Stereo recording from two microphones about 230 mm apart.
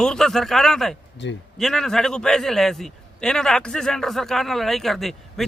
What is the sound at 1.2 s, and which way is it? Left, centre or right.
Speech, left.